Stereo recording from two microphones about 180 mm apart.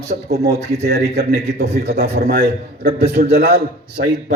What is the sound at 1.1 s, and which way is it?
Speech, 60° right (ahead or behind).